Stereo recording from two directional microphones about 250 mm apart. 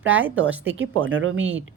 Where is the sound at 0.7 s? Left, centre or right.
Right.